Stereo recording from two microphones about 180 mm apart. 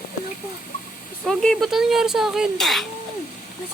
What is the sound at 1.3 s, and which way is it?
Speech, 5° left (ahead or behind).